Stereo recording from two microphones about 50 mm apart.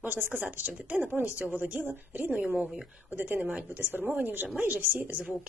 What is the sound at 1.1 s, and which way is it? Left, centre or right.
Speech, right.